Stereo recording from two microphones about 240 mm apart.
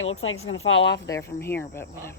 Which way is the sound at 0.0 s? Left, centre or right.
Left.